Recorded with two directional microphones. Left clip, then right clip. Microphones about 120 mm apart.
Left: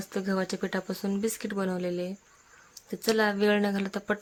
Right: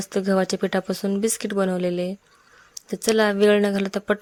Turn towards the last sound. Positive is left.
turn(degrees=-45)  # may be behind; listen again after turning